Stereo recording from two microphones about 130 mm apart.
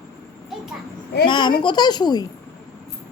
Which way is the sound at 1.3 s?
40° left (ahead or behind).